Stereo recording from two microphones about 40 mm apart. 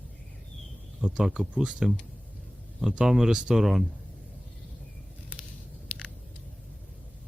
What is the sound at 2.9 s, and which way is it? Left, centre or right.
Speech, centre.